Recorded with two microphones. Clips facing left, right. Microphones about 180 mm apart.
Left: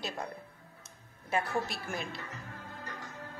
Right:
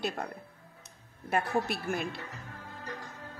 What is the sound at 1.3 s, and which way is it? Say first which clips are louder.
Speech: right 3 dB; 60° right (ahead or behind).